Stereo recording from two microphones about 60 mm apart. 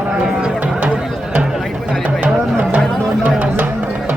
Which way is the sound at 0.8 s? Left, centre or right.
Centre.